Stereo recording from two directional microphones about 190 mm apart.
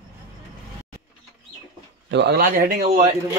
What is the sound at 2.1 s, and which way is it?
Speech, 60° right (ahead or behind).